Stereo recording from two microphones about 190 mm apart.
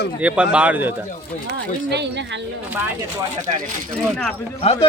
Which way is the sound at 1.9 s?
65° right (ahead or behind).